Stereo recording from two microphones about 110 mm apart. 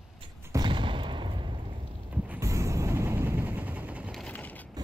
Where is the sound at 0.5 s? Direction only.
45° right (ahead or behind).